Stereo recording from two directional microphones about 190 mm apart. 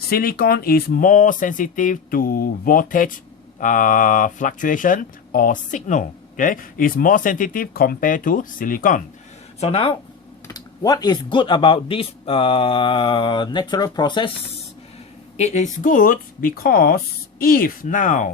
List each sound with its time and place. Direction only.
0.1 s speech: 50° left (ahead or behind)
9.6 s speech: 30° left (ahead or behind)
10.5 s speech: 20° left (ahead or behind)
15.4 s speech: 35° left (ahead or behind)